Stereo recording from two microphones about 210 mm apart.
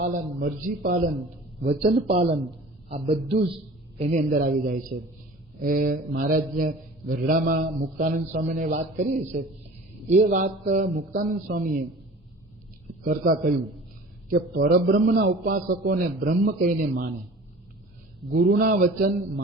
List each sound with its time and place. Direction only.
0.3 s a man's voice: 45° right (ahead or behind)
1.6 s a man's voice: 30° right (ahead or behind)
13.1 s a man's voice: 40° right (ahead or behind)
18.3 s a man's voice: 50° right (ahead or behind)